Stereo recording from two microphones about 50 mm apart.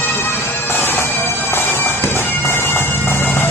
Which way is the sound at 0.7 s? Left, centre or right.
Left.